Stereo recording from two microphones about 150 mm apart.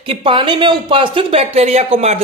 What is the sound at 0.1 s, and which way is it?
Speech, 35° right (ahead or behind).